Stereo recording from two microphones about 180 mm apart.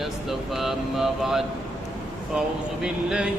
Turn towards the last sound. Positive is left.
turn(degrees=-5)  # may be behind; listen again after turning